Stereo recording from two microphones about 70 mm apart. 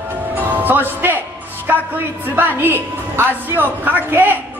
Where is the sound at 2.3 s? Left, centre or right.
Right.